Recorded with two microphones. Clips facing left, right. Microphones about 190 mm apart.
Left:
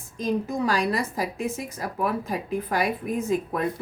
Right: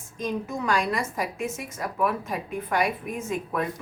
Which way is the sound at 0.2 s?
35° left (ahead or behind).